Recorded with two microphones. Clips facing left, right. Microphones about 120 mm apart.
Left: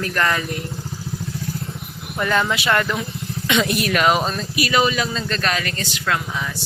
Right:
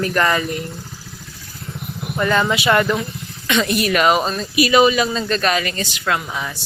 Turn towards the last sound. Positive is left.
turn(degrees=-10)  # may be behind; listen again after turning